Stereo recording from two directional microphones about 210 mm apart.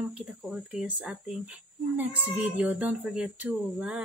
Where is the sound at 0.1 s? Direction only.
5° right (ahead or behind).